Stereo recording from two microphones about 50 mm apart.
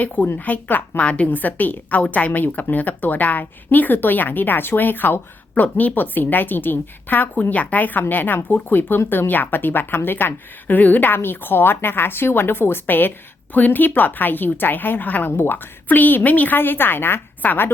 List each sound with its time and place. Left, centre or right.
0.3 s a woman's voice: left
1.0 s a woman's voice: left
1.3 s a woman's voice: left